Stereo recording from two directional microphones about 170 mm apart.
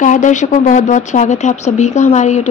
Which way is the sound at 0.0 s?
45° left (ahead or behind).